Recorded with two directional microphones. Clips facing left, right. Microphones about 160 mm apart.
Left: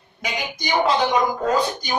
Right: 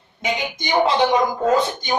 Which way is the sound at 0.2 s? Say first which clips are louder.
Right 4 dB; 25° right (ahead or behind).